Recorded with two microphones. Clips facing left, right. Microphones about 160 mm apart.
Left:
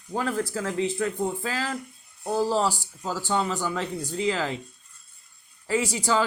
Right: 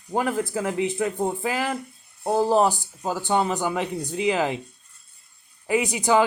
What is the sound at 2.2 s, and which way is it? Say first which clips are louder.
Speech: right 4 dB; 60° right (ahead or behind).